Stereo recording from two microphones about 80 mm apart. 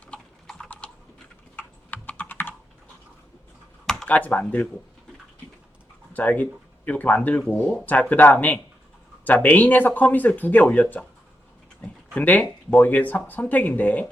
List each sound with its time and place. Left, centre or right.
1.5 s computer keyboard: centre
3.8 s computer keyboard: centre
4.1 s speech: centre
6.1 s speech: centre
12.1 s speech: centre